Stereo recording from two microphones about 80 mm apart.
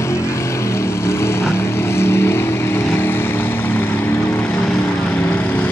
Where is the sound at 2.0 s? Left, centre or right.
Left.